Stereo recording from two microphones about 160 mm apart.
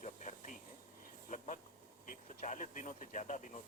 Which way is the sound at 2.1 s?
55° left (ahead or behind).